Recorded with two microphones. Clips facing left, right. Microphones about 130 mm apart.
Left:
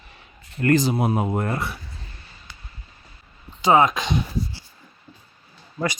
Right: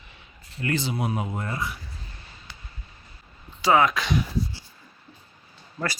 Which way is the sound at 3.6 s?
20° left (ahead or behind).